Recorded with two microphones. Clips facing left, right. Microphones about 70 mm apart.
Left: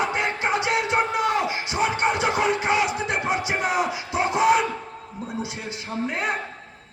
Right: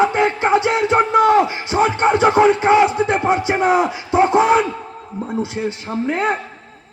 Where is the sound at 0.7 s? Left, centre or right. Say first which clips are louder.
Right 7 dB; right.